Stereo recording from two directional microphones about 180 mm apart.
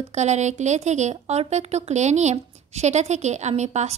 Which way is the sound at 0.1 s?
40° right (ahead or behind).